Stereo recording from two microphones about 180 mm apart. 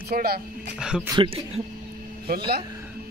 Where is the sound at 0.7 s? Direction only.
5° right (ahead or behind).